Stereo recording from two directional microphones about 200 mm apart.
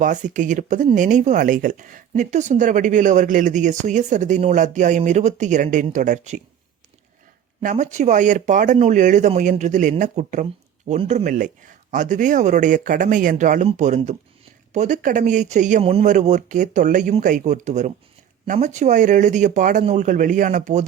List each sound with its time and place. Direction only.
0.0 s speech: 40° right (ahead or behind)
7.6 s speech: 40° right (ahead or behind)